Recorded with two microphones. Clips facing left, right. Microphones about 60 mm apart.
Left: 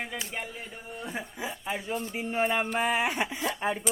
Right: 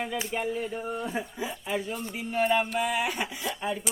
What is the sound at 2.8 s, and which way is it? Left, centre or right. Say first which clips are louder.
Speech: left 1 dB; left.